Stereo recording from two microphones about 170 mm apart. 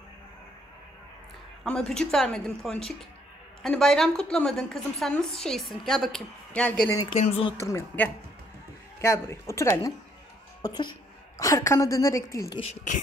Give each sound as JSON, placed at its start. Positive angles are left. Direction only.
{"t": 1.6, "sound": "a woman's voice", "side_deg": 5}
{"t": 7.2, "sound": "speech", "side_deg": 35}
{"t": 7.6, "sound": "a woman's voice", "side_deg": 15}